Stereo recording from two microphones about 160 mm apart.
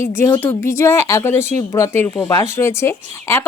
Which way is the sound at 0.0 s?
15° left (ahead or behind).